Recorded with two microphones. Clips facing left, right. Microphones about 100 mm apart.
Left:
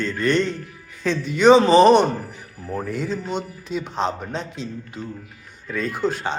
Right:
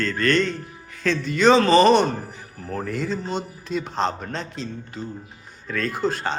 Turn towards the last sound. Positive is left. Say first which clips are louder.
# left 1 dB
turn(degrees=10)  # may be behind; listen again after turning